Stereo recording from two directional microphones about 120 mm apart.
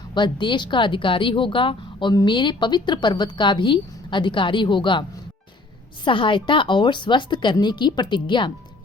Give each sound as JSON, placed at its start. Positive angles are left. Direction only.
{"t": 0.1, "sound": "a woman's voice", "side_deg": 40}
{"t": 6.1, "sound": "a woman's voice", "side_deg": 45}